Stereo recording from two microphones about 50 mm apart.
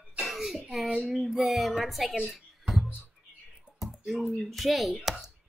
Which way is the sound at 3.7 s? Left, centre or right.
Centre.